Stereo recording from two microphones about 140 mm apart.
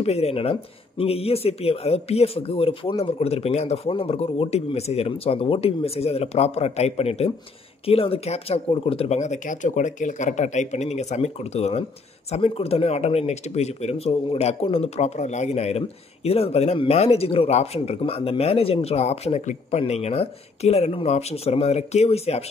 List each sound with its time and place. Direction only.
0.0 s speech: 50° left (ahead or behind)